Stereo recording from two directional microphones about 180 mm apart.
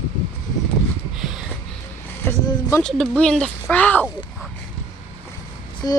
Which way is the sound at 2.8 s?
5° left (ahead or behind).